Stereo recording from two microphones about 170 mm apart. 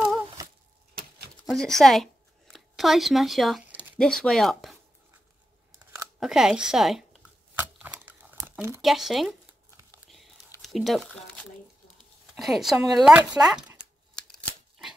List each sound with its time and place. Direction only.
0.4 s a sound: 20° right (ahead or behind)
1.5 s a sound: centre (ahead or behind)
4.0 s speech: 5° left (ahead or behind)
6.1 s a sound: 5° right (ahead or behind)
8.8 s speech: centre (ahead or behind)
10.0 s whispering: centre (ahead or behind)
10.6 s speech: centre (ahead or behind)
12.4 s speech: centre (ahead or behind)
14.2 s scissors: centre (ahead or behind)